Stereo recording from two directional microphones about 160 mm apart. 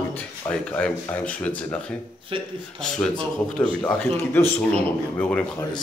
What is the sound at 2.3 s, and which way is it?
Speech, 35° right (ahead or behind).